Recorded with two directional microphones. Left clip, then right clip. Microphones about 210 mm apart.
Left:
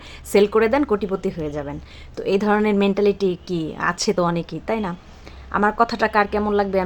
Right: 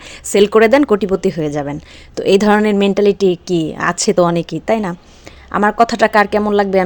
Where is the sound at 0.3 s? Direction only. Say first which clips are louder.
Right 7 dB; 35° right (ahead or behind).